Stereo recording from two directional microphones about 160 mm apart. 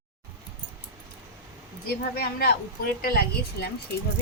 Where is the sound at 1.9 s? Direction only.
75° left (ahead or behind).